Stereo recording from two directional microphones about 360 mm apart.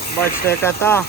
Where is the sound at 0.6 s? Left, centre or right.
Centre.